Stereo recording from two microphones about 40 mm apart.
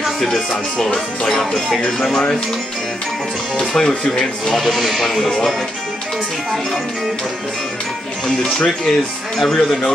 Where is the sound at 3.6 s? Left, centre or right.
Centre.